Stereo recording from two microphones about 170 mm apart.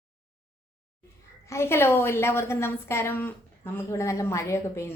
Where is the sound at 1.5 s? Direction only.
15° left (ahead or behind).